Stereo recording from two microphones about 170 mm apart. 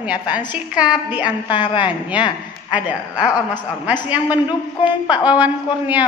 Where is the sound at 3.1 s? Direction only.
25° left (ahead or behind).